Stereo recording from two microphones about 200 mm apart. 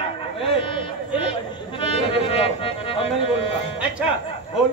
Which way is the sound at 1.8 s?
25° left (ahead or behind).